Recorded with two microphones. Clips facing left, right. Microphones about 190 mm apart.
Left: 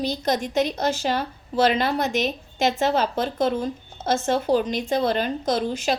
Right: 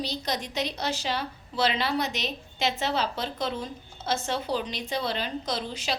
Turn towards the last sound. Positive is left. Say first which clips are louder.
# left 9 dB
turn(degrees=50)  # may be behind; listen again after turning